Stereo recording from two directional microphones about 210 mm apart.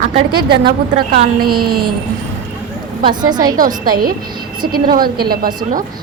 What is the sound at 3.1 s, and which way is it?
Speech, 20° right (ahead or behind).